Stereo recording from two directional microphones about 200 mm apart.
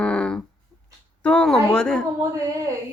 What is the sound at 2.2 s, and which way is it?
Speech, 15° right (ahead or behind).